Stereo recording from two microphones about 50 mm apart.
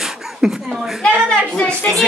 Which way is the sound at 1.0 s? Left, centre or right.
Left.